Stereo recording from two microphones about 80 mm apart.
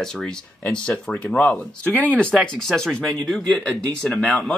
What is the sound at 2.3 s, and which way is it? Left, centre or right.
Speech, centre.